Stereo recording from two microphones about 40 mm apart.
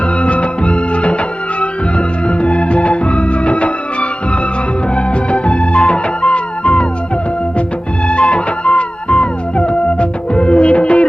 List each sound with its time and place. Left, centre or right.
0.2 s music: left
4.9 s music of bollywood: left
8.0 s music: left